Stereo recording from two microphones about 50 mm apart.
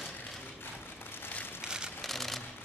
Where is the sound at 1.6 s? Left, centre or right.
Centre.